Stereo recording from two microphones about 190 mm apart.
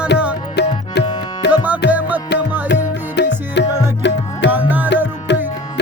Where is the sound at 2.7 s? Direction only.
65° left (ahead or behind).